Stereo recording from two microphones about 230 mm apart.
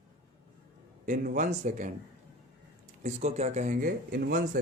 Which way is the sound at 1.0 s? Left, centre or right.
Right.